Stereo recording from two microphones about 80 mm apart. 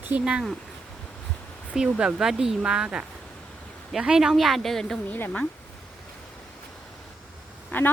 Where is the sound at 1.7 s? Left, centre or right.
Centre.